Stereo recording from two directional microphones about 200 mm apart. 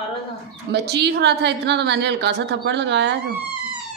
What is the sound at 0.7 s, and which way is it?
A woman's voice, 55° right (ahead or behind).